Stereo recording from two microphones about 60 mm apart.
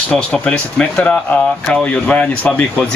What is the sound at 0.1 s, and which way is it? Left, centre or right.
A man's voice, left.